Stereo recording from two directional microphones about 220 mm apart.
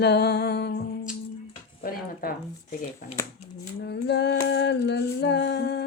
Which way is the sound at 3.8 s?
50° left (ahead or behind).